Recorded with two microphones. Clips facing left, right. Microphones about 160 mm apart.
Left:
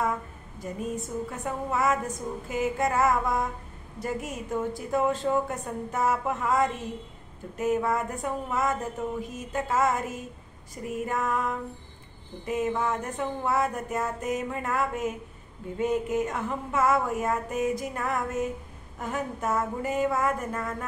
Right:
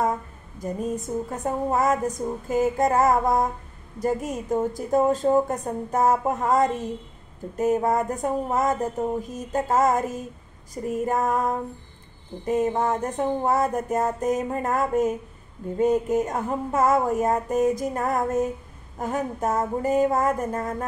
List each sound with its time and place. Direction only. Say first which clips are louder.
0.6 s speech: right 5 dB; 40° right (ahead or behind)